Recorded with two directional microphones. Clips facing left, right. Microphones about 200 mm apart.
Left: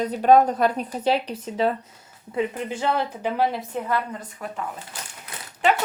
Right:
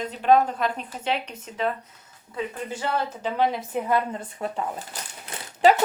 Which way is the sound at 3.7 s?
20° right (ahead or behind).